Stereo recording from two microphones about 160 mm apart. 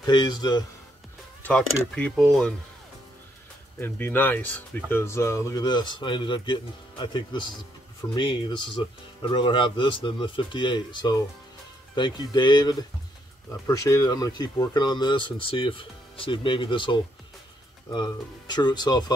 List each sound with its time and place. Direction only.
0.0 s speech: 25° left (ahead or behind)
1.4 s speech: 5° left (ahead or behind)
3.8 s speech: 10° left (ahead or behind)